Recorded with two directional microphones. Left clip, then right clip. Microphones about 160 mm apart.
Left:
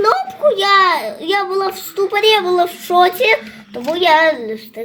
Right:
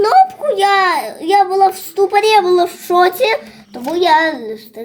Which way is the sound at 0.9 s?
80° right.